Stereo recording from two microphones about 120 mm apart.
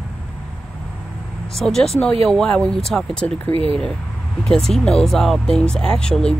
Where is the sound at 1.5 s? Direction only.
Centre (ahead or behind).